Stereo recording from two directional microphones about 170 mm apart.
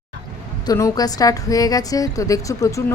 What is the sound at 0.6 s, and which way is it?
A woman's voice, 20° left (ahead or behind).